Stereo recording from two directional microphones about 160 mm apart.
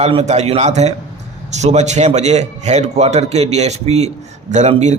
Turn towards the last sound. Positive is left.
turn(degrees=-45)  # may be behind; listen again after turning